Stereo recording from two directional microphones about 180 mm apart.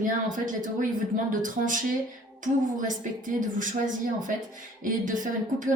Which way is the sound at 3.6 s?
45° right (ahead or behind).